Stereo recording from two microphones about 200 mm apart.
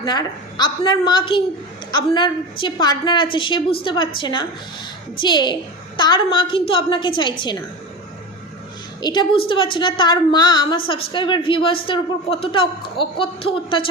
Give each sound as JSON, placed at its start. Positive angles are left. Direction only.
{"t": 0.0, "sound": "a woman's voice", "side_deg": 20}
{"t": 9.0, "sound": "a woman's voice", "side_deg": 20}